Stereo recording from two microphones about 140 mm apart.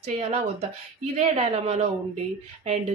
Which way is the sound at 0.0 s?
50° right (ahead or behind).